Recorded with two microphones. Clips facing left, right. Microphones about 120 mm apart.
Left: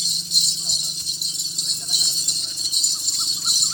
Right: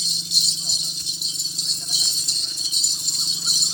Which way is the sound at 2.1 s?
15° left (ahead or behind).